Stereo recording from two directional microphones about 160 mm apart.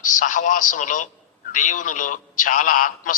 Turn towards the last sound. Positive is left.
turn(degrees=55)  # may be behind; listen again after turning